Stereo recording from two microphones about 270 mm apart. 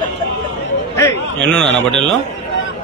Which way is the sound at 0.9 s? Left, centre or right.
Centre.